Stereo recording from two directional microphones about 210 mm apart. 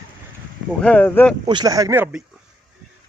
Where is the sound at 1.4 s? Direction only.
20° right (ahead or behind).